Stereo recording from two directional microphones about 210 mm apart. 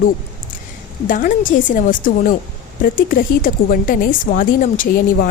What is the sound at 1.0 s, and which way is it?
A woman's voice, 40° left (ahead or behind).